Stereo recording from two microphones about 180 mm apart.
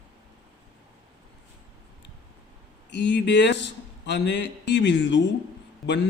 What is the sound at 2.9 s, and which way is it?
A man's voice, 70° left (ahead or behind).